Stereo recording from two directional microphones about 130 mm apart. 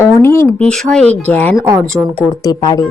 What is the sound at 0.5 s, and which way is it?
Speech, 5° left (ahead or behind).